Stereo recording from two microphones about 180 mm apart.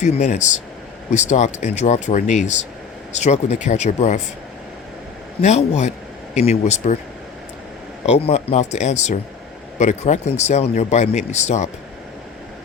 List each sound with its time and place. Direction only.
0.0 s speech: 40° left (ahead or behind)
5.4 s speech: 40° left (ahead or behind)
8.0 s speech: 35° left (ahead or behind)